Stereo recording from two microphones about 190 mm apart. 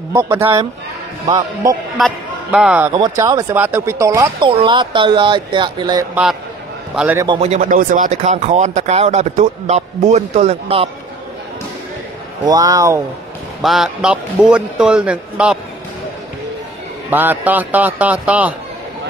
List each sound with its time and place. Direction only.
0.1 s speech: 15° right (ahead or behind)
2.0 s a man's voice: centre (ahead or behind)
2.9 s speech: 20° right (ahead or behind)
7.0 s speech: 10° right (ahead or behind)
7.2 s speech: 35° right (ahead or behind)
12.4 s speech: 20° right (ahead or behind)
13.6 s a man's voice: centre (ahead or behind)
17.1 s speech: 10° right (ahead or behind)